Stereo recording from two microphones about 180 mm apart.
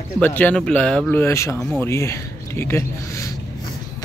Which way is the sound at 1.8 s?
15° left (ahead or behind).